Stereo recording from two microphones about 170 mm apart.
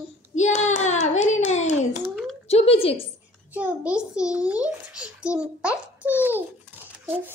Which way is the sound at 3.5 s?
10° right (ahead or behind).